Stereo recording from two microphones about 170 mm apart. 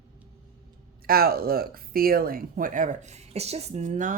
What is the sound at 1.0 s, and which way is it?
Speech, 60° right (ahead or behind).